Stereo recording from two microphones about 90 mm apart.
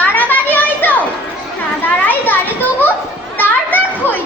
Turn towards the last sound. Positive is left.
turn(degrees=20)  # may be behind; listen again after turning